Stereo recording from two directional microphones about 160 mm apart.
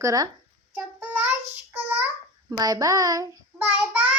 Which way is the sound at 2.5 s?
25° right (ahead or behind).